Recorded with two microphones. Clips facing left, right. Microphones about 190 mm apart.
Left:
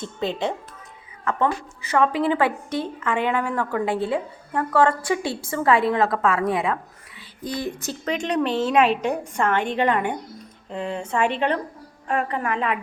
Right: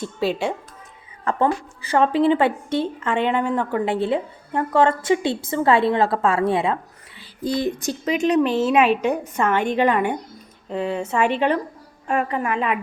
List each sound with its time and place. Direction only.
1.2 s a woman's voice: 30° right (ahead or behind)
7.2 s a sound: 30° right (ahead or behind)
7.8 s a woman's voice: 10° right (ahead or behind)